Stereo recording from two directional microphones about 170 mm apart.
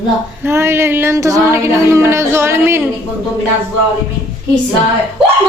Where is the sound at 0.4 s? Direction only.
15° right (ahead or behind).